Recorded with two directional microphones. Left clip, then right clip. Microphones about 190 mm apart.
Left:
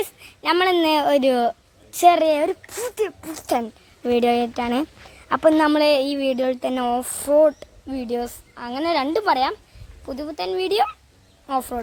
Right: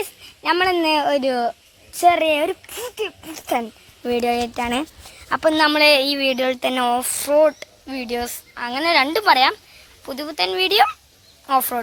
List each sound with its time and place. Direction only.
0.0 s speech: centre (ahead or behind)
2.2 s speech: 5° right (ahead or behind)
2.8 s speech: 15° left (ahead or behind)
3.2 s a woman's voice: 5° left (ahead or behind); by 5.8 s 25° left (ahead or behind)
5.8 s speech: 15° left (ahead or behind)